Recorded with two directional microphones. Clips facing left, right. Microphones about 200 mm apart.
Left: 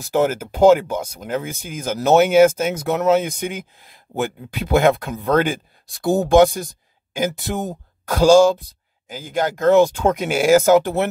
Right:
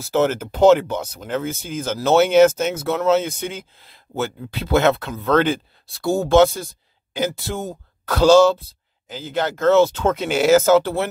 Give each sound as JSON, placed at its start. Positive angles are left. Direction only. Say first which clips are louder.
{"t": 0.0, "sound": "speech", "louder": "even", "side_deg": 10}